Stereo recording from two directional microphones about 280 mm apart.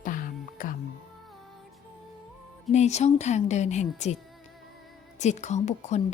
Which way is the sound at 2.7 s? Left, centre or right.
Left.